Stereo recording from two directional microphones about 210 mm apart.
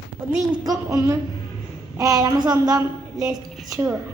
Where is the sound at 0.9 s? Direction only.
15° right (ahead or behind).